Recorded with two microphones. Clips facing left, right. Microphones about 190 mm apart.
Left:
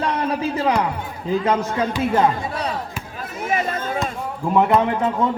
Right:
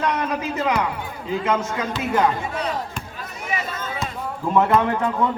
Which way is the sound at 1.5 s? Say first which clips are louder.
Left 1 dB; 35° left (ahead or behind).